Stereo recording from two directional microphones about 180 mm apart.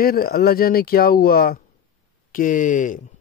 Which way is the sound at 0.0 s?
55° left (ahead or behind).